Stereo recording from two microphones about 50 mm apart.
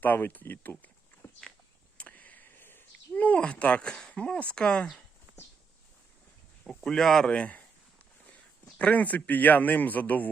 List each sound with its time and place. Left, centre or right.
0.0 s speech: left
2.0 s a sound: left
3.2 s speech: left
6.7 s speech: centre
7.3 s a sound: left
8.8 s a man's voice: left